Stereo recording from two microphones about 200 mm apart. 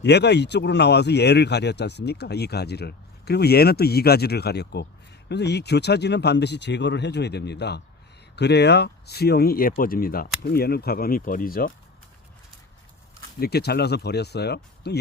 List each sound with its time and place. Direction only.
0.0 s speech: 60° left (ahead or behind)
13.4 s speech: 55° left (ahead or behind)